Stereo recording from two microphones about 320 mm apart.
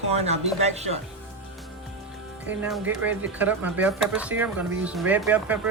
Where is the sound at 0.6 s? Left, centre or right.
Centre.